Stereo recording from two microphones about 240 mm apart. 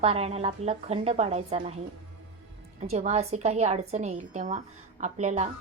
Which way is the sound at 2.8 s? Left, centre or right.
Right.